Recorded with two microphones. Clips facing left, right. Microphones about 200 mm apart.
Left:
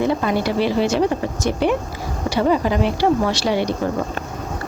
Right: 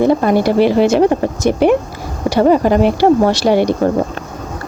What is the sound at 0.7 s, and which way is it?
Speech, 60° right (ahead or behind).